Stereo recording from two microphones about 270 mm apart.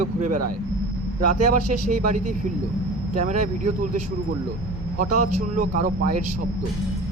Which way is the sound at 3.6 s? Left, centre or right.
Right.